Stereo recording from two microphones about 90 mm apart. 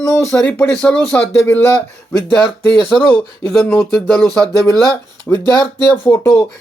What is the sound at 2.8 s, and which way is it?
Speech, 70° right (ahead or behind).